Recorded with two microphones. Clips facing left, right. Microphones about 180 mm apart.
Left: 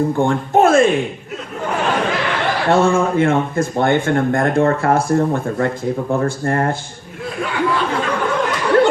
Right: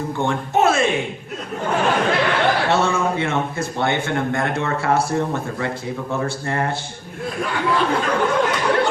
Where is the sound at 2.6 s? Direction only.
50° left (ahead or behind).